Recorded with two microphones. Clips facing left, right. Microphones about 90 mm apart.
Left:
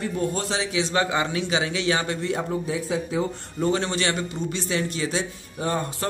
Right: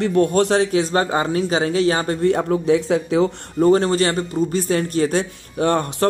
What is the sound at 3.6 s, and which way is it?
Speech, 40° right (ahead or behind).